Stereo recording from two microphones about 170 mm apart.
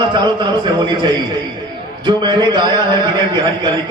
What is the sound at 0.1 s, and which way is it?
A man's voice, 25° right (ahead or behind).